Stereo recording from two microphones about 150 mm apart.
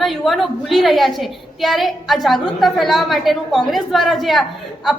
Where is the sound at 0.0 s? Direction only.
Centre (ahead or behind).